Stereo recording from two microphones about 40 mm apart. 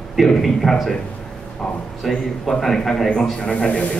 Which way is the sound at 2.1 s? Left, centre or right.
Centre.